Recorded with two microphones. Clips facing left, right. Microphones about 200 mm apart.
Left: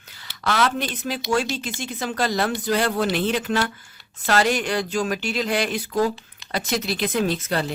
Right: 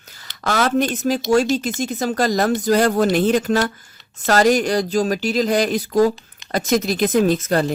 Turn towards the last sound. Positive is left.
turn(degrees=-45)  # may be behind; listen again after turning